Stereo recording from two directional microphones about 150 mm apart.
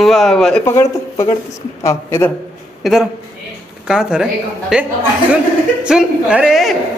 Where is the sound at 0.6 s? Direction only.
20° left (ahead or behind).